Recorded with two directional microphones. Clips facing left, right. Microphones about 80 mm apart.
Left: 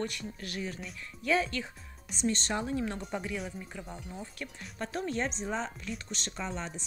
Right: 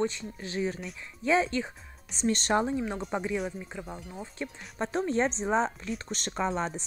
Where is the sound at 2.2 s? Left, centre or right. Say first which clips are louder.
Right 5 dB; right.